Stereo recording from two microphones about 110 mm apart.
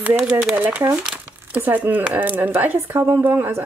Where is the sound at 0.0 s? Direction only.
10° right (ahead or behind).